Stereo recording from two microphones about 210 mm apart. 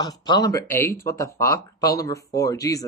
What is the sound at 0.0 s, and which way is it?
Speech, 20° left (ahead or behind).